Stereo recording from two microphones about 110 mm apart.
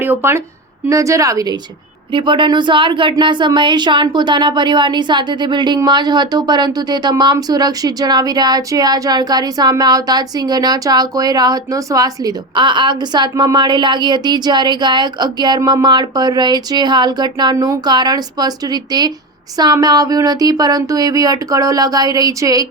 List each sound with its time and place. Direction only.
0.0 s speech: 20° right (ahead or behind)
2.1 s speech: 45° right (ahead or behind); by 22.6 s 30° right (ahead or behind)